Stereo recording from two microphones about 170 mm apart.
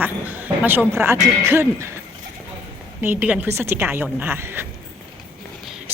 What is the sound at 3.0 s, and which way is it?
Speech, 10° right (ahead or behind).